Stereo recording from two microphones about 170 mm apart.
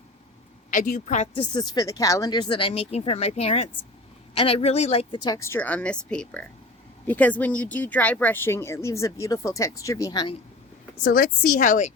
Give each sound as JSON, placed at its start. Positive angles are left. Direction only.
{"t": 0.7, "sound": "a woman's voice", "side_deg": 55}
{"t": 1.0, "sound": "speech", "side_deg": 45}
{"t": 1.4, "sound": "speech", "side_deg": 25}
{"t": 11.0, "sound": "speech", "side_deg": 60}